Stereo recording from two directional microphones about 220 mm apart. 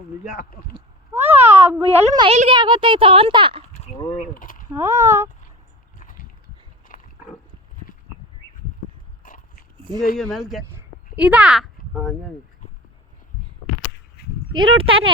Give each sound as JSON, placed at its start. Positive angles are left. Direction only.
{"t": 0.3, "sound": "speech", "side_deg": 40}
{"t": 0.7, "sound": "a sound", "side_deg": -10}
{"t": 1.8, "sound": "a child's voice", "side_deg": -25}
{"t": 4.4, "sound": "speech", "side_deg": 40}
{"t": 4.7, "sound": "speech", "side_deg": -10}
{"t": 6.0, "sound": "a sound", "side_deg": 40}
{"t": 6.8, "sound": "pig", "side_deg": 40}
{"t": 9.2, "sound": "dog", "side_deg": 40}
{"t": 10.2, "sound": "speech", "side_deg": 0}
{"t": 10.7, "sound": "a sound", "side_deg": -10}
{"t": 14.2, "sound": "dog", "side_deg": 45}
{"t": 14.5, "sound": "a child's voice", "side_deg": -20}